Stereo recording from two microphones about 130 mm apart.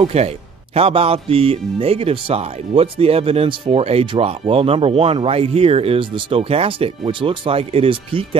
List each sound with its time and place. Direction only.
0.0 s speech: 55° right (ahead or behind)